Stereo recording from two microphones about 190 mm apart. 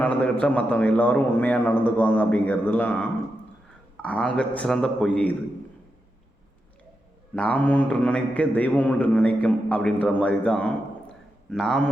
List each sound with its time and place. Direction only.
0.0 s a man's voice: 5° left (ahead or behind)
7.3 s a man's voice: 5° left (ahead or behind)